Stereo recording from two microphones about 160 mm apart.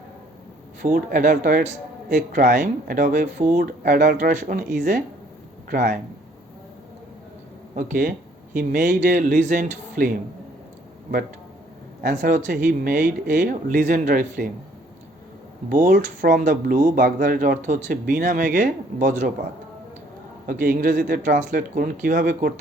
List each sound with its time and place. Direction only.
0.8 s a man's voice: 55° right (ahead or behind)
7.8 s a man's voice: 60° right (ahead or behind)
12.0 s a man's voice: 55° right (ahead or behind)
15.7 s a man's voice: 55° right (ahead or behind)
20.5 s a man's voice: 60° right (ahead or behind)